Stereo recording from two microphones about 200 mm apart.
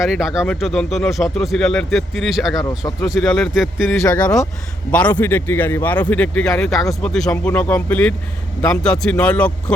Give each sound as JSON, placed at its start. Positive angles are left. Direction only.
{"t": 0.0, "sound": "speech", "side_deg": 0}
{"t": 2.6, "sound": "speech", "side_deg": 20}
{"t": 3.1, "sound": "speech", "side_deg": 0}
{"t": 4.0, "sound": "speech", "side_deg": 10}